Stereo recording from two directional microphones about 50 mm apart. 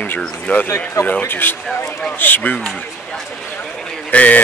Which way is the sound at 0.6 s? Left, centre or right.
Left.